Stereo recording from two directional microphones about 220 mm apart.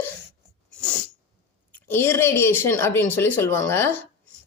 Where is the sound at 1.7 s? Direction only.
10° left (ahead or behind).